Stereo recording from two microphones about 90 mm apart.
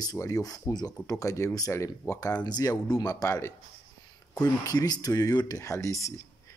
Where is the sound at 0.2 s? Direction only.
40° left (ahead or behind).